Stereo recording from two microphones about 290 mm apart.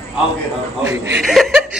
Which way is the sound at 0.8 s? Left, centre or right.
Centre.